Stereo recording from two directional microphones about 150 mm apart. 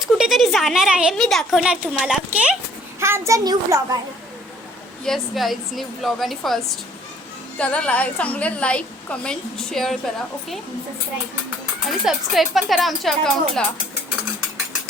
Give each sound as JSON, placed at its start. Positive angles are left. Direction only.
{"t": 0.0, "sound": "a sound", "side_deg": 0}
{"t": 1.1, "sound": "a woman's voice", "side_deg": 0}
{"t": 3.0, "sound": "a child's voice", "side_deg": -20}
{"t": 5.0, "sound": "a woman's voice", "side_deg": 0}
{"t": 7.6, "sound": "a woman's voice", "side_deg": 10}
{"t": 11.9, "sound": "a woman's voice", "side_deg": 0}